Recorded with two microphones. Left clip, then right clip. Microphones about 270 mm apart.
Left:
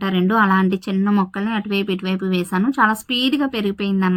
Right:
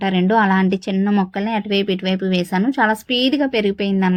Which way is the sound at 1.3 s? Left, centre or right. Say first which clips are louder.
Right 2 dB; right.